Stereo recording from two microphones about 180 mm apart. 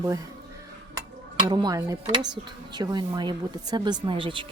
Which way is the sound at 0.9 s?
25° right (ahead or behind).